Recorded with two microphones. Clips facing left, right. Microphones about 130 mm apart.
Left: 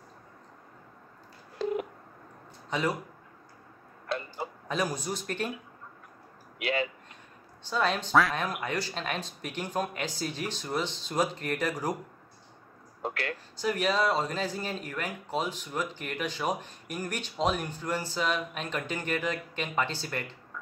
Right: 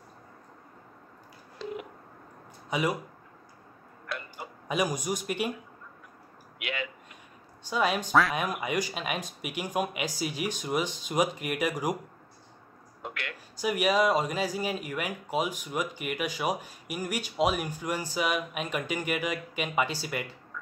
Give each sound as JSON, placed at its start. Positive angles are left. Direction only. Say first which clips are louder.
{"t": 1.6, "sound": "telephone dialing", "louder": "left 7 dB", "side_deg": 45}
{"t": 2.7, "sound": "speech", "louder": "right 1 dB", "side_deg": -10}
{"t": 4.1, "sound": "tick-tock", "louder": "left 5 dB", "side_deg": 25}
{"t": 4.6, "sound": "speech", "louder": "right 3 dB", "side_deg": -15}
{"t": 6.6, "sound": "a sound", "louder": "left 6 dB", "side_deg": 35}
{"t": 7.6, "sound": "speech", "louder": "right 1 dB", "side_deg": -10}
{"t": 13.0, "sound": "a sound", "louder": "left 5 dB", "side_deg": 35}
{"t": 13.6, "sound": "speech", "louder": "right 2 dB", "side_deg": -10}